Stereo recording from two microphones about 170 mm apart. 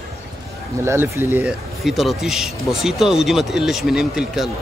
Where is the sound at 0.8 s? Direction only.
15° right (ahead or behind).